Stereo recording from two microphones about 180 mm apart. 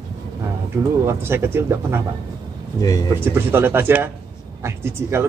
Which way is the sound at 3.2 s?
10° right (ahead or behind).